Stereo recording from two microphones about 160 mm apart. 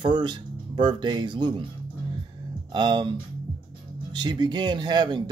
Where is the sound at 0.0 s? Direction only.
30° right (ahead or behind).